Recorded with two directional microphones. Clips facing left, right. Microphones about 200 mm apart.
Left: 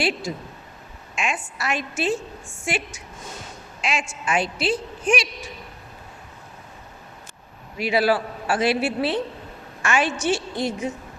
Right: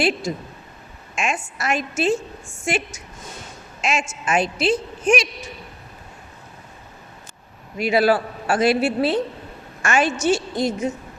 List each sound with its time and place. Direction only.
0.3 s a woman's voice: 45° right (ahead or behind)
7.8 s a woman's voice: 45° right (ahead or behind)